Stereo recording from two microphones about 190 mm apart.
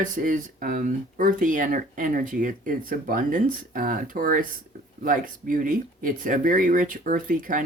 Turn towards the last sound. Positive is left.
turn(degrees=-45)  # may be behind; listen again after turning